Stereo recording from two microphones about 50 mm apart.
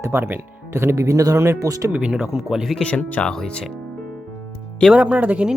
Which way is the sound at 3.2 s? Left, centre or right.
Centre.